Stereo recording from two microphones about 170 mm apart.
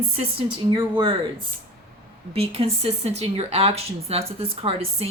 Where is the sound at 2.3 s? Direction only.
35° right (ahead or behind).